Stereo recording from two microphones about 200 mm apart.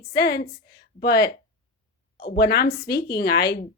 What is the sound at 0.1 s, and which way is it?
Speech, 55° left (ahead or behind).